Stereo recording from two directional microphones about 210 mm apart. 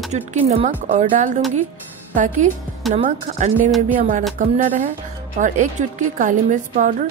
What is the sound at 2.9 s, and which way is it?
Speech, 35° right (ahead or behind).